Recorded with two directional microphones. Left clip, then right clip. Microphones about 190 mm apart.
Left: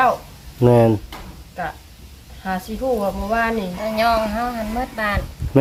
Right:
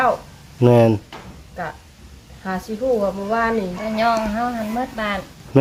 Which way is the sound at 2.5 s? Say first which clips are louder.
Right 1 dB; 20° right (ahead or behind).